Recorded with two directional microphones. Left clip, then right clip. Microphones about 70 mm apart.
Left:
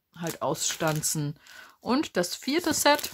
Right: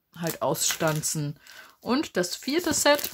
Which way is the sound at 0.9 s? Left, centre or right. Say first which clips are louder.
Right 1 dB; left.